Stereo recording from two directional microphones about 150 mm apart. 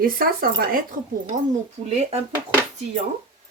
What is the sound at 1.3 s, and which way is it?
Speech, 60° right (ahead or behind).